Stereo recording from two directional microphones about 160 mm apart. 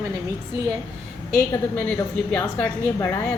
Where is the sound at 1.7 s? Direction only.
10° left (ahead or behind).